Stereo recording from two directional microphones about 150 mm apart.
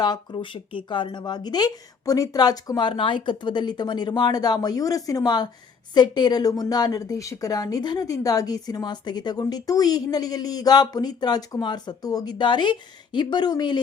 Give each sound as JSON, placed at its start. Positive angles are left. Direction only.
{"t": 0.0, "sound": "a woman's voice", "side_deg": 25}